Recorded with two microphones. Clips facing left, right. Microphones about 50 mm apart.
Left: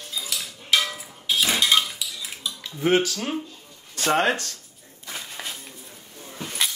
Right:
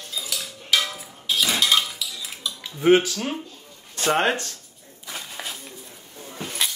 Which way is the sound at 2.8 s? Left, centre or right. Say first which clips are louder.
Right 4 dB; centre.